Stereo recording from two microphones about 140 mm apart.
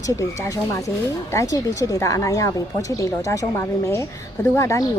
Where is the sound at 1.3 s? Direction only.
20° left (ahead or behind).